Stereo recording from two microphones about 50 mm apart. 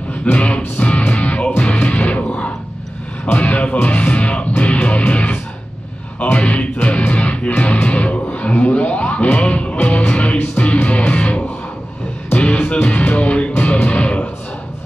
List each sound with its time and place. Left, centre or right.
0.2 s music: left